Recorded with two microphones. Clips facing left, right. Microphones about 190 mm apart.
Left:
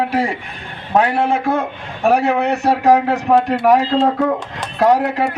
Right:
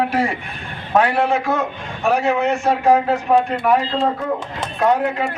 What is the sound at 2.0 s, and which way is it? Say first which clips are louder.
Speech: left 3 dB; 60° left (ahead or behind).